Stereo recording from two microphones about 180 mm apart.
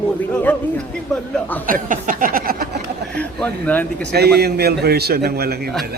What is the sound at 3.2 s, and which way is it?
Speech, 10° left (ahead or behind).